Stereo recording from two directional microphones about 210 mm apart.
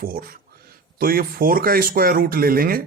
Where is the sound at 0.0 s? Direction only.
45° right (ahead or behind).